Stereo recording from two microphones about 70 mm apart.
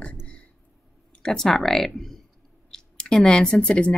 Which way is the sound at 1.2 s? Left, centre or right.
Centre.